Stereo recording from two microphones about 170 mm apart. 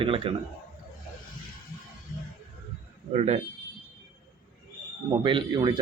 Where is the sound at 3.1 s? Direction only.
40° right (ahead or behind).